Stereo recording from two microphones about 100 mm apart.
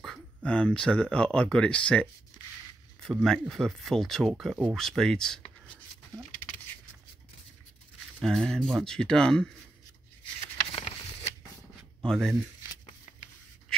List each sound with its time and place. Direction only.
0.0 s speech: 5° left (ahead or behind)
3.2 s speech: 5° left (ahead or behind)
8.2 s speech: 5° left (ahead or behind)
10.7 s a sound: 80° left
12.0 s speech: 5° left (ahead or behind)